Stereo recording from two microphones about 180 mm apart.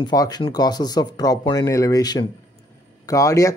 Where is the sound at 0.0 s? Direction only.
20° left (ahead or behind).